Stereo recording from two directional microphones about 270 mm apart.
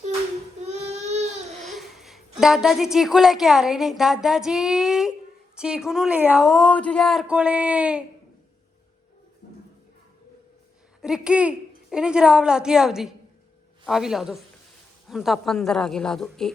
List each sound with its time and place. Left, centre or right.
0.6 s baby cry: right
1.6 s a woman's voice: centre
11.0 s a woman's voice: centre